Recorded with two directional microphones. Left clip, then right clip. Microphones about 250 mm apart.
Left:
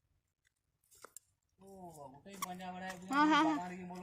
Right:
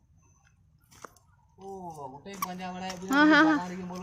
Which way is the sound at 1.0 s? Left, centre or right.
Left.